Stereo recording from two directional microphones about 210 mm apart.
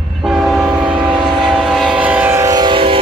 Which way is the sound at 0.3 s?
5° right (ahead or behind).